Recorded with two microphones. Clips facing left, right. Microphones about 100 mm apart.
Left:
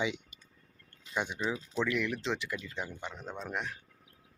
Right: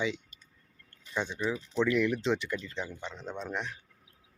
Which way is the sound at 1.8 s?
Centre (ahead or behind).